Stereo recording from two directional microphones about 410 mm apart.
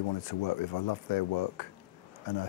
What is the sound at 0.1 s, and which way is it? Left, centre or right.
Speech, left.